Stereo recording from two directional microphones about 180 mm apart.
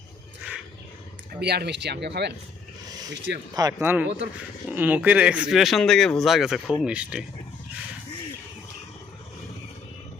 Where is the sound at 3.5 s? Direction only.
15° right (ahead or behind).